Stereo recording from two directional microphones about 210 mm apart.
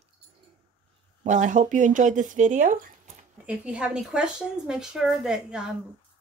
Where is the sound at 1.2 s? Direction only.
35° right (ahead or behind).